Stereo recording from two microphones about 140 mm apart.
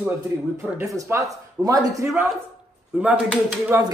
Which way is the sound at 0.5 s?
10° right (ahead or behind).